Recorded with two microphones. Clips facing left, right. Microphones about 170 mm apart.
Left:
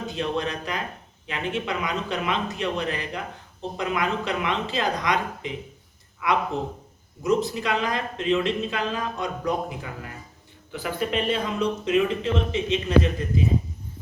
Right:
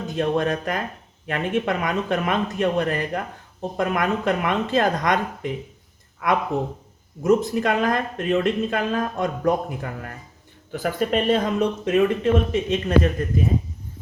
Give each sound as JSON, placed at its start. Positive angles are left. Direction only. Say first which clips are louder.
{"t": 0.2, "sound": "speech", "louder": "right 6 dB", "side_deg": -50}